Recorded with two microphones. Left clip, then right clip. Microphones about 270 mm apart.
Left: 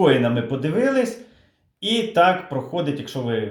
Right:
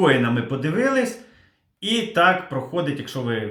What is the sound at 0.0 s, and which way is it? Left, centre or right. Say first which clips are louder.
Speech: left 1 dB; centre.